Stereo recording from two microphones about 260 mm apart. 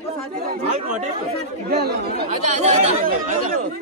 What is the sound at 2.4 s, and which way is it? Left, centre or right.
Speech, right.